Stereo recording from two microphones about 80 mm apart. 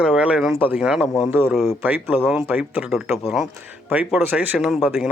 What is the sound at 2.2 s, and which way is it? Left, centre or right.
Speech, centre.